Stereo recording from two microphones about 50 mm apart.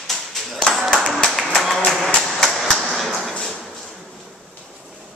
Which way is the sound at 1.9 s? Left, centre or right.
Centre.